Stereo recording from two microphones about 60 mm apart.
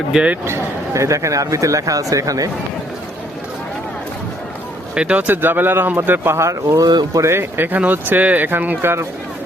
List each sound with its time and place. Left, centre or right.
0.1 s speech: centre
0.4 s speech: right
4.9 s speech: right
7.3 s speech: right
8.8 s speech: right